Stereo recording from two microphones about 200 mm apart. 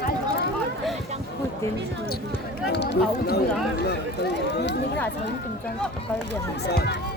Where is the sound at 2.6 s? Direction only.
55° left (ahead or behind).